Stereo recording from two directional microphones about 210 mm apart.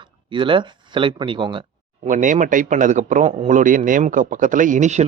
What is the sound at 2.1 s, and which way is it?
A man's voice, 35° right (ahead or behind).